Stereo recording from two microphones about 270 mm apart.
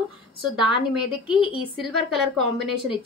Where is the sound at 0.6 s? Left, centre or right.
Centre.